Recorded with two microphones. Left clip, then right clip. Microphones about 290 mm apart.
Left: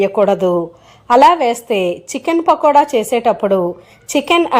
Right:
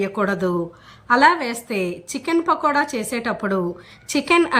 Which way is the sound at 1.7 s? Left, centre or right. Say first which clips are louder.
Left 9 dB; left.